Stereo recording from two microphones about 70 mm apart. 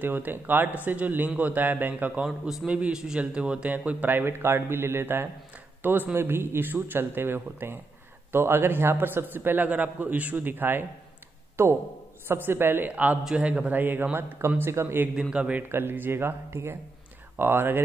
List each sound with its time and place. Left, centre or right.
0.0 s a man's voice: right
5.8 s a sound: right
6.1 s a man's voice: right
13.2 s a man's voice: centre
13.5 s a man's voice: right
15.1 s a man's voice: centre
15.7 s speech: right